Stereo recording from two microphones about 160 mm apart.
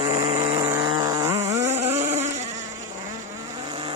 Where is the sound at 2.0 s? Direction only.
45° right (ahead or behind).